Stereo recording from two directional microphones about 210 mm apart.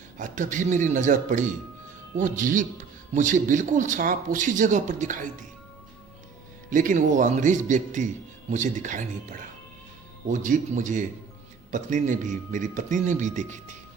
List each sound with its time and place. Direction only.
0.2 s a man's voice: 35° right (ahead or behind)
6.7 s a man's voice: 40° right (ahead or behind)